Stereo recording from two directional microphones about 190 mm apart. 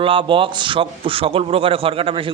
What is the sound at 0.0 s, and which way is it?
A man's voice, 25° right (ahead or behind).